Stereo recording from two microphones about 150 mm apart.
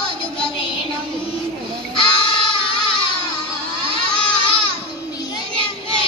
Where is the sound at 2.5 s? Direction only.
35° left (ahead or behind).